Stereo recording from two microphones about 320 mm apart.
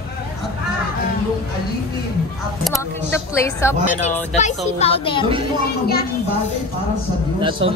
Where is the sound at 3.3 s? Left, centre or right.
Centre.